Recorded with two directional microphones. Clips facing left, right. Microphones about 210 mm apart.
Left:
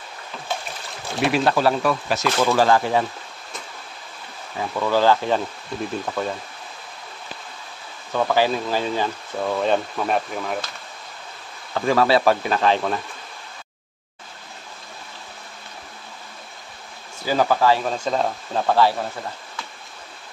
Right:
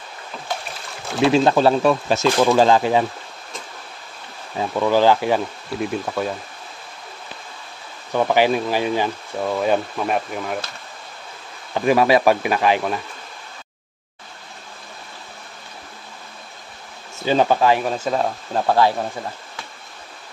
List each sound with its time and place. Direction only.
1.2 s speech: 25° right (ahead or behind)
4.6 s speech: 15° right (ahead or behind)
8.1 s speech: 15° right (ahead or behind)
11.7 s speech: 15° right (ahead or behind)
17.2 s speech: 20° right (ahead or behind)
17.8 s speech: 5° right (ahead or behind)